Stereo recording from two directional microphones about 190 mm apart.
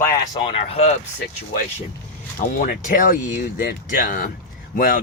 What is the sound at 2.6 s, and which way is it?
Speech, 45° left (ahead or behind).